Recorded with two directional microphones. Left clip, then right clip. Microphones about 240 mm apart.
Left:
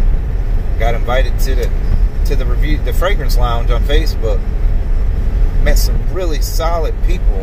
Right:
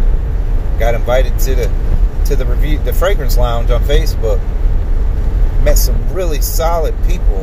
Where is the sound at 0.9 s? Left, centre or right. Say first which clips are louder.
Right 3 dB; centre.